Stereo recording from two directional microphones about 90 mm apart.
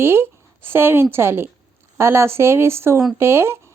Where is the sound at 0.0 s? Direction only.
25° right (ahead or behind).